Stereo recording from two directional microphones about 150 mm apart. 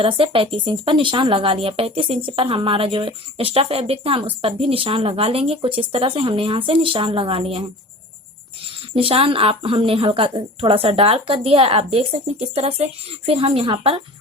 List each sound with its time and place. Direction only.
0.0 s a woman's voice: 35° right (ahead or behind)
8.6 s a woman's voice: 35° right (ahead or behind)